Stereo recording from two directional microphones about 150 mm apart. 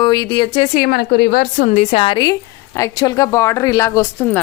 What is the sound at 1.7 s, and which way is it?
A woman's voice, 40° left (ahead or behind).